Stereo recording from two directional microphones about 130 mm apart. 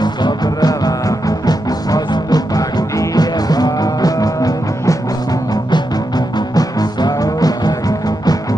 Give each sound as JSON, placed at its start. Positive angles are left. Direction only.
{"t": 0.0, "sound": "music", "side_deg": 30}